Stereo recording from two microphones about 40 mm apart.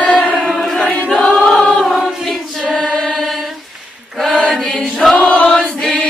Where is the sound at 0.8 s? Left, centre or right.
Left.